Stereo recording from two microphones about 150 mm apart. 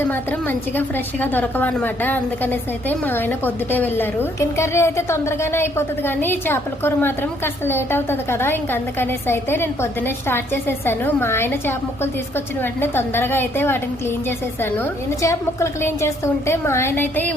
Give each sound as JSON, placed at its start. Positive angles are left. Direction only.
{"t": 0.0, "sound": "a woman's voice", "side_deg": 10}